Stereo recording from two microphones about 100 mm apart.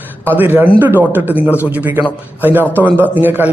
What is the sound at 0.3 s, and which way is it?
A man's voice, 20° right (ahead or behind).